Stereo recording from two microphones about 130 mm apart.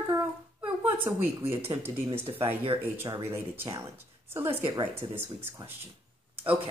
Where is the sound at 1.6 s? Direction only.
50° right (ahead or behind).